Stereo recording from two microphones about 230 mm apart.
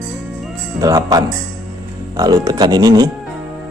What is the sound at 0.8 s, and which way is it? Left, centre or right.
Speech, centre.